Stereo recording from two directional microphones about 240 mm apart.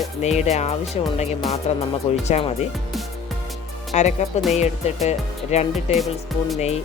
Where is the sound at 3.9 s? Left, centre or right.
Left.